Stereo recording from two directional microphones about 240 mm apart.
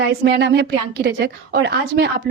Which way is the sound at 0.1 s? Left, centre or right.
Right.